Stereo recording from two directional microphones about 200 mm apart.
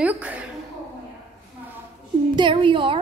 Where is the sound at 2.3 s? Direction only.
25° right (ahead or behind).